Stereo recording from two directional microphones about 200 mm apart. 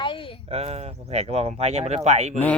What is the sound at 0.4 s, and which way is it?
Speech, 30° right (ahead or behind).